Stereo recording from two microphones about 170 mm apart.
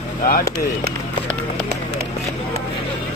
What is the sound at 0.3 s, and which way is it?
Speech, 60° left (ahead or behind).